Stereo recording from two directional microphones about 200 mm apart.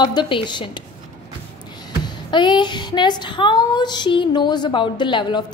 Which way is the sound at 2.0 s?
25° left (ahead or behind).